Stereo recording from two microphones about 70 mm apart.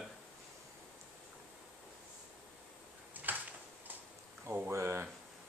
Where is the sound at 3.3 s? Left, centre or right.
Right.